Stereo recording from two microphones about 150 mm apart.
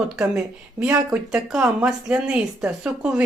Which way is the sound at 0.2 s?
5° right (ahead or behind).